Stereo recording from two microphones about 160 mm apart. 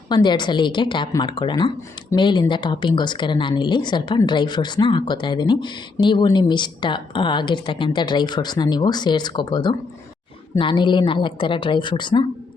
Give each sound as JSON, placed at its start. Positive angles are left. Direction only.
{"t": 0.1, "sound": "a woman's voice", "side_deg": 30}